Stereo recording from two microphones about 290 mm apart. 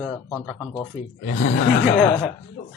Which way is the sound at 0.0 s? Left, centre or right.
Centre.